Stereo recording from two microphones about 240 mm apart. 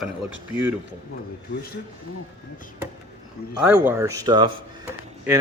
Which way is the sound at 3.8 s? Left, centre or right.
Centre.